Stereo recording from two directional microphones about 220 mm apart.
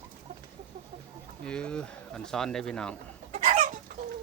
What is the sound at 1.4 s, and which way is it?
Speech, 5° left (ahead or behind).